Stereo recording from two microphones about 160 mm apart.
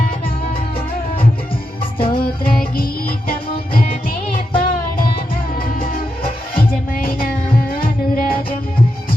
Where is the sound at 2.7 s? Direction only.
65° left (ahead or behind).